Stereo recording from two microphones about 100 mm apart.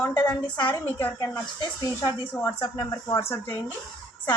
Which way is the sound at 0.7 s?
15° left (ahead or behind).